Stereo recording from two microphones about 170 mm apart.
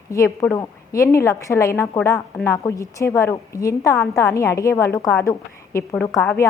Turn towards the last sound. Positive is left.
turn(degrees=15)  # may be behind; listen again after turning